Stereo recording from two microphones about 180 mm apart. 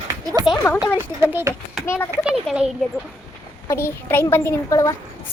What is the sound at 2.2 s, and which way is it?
Speech, 5° right (ahead or behind).